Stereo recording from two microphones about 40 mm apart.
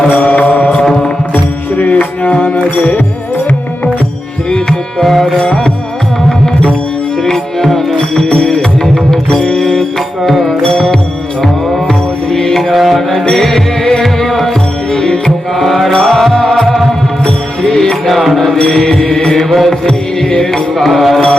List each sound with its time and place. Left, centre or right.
0.1 s mantra: left
0.8 s music: centre
1.3 s music: left
4.5 s tabla: centre
5.4 s music: centre
7.6 s music: centre
10.2 s music: centre
11.7 s mantra: centre
12.7 s music: centre
13.2 s music: centre
16.6 s music: centre
17.2 s music: centre
18.0 s music: centre
20.8 s mantra: centre